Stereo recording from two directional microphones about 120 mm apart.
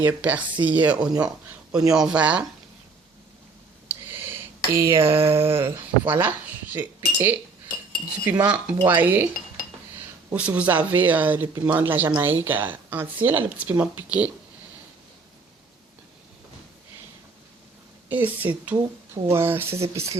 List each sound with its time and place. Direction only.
0.0 s speech: 15° right (ahead or behind)
3.8 s a sound: 15° right (ahead or behind)
5.5 s speech: 20° right (ahead or behind)
10.3 s speech: 10° right (ahead or behind)
18.1 s speech: 15° right (ahead or behind)